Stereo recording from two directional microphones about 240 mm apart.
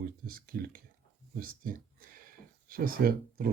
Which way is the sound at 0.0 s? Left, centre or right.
Right.